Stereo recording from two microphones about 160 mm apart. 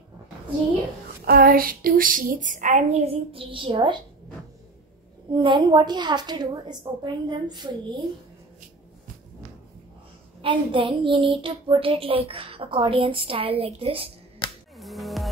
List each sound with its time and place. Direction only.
1.2 s speech: 65° right (ahead or behind); by 4.0 s 30° right (ahead or behind)
5.3 s a woman's voice: 30° right (ahead or behind)
10.4 s child singing: 30° right (ahead or behind)
14.8 s music: centre (ahead or behind)